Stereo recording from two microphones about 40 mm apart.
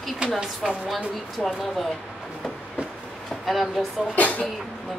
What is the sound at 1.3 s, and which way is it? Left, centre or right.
Speech, centre.